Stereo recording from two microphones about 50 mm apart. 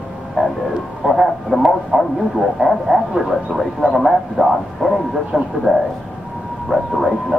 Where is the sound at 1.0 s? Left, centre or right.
Centre.